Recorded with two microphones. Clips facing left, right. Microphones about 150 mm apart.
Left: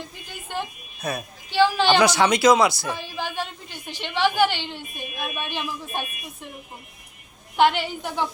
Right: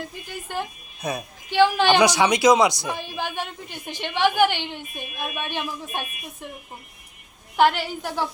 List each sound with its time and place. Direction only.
0.5 s a woman's voice: 15° right (ahead or behind)
4.4 s a woman's voice: 55° right (ahead or behind)
4.7 s a woman's voice: 15° right (ahead or behind)
7.5 s a woman's voice: 10° right (ahead or behind)